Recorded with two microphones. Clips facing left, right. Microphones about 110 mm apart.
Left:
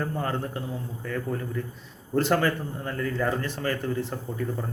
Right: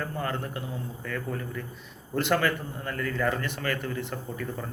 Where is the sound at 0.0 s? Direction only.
30° left (ahead or behind).